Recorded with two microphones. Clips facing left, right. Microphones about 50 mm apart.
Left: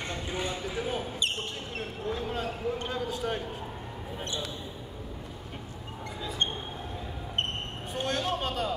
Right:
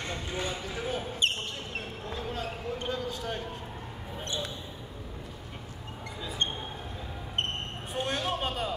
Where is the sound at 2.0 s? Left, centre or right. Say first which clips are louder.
Left 5 dB; centre.